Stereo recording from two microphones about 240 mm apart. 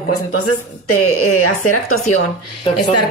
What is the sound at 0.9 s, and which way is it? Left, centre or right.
A woman's voice, left.